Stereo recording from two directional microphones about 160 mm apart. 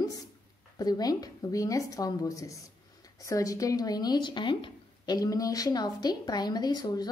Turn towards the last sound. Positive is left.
turn(degrees=25)  # may be behind; listen again after turning